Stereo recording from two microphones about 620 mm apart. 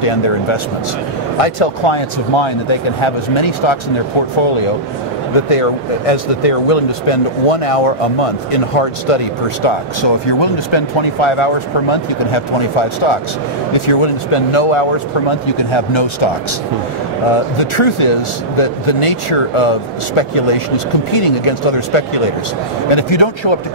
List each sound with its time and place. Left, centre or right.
0.0 s speech: left
5.3 s speech: left
17.6 s speech: left